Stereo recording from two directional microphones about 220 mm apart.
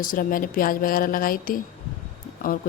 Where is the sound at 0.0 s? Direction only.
40° left (ahead or behind).